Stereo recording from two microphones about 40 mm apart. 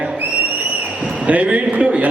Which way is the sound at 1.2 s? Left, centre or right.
Right.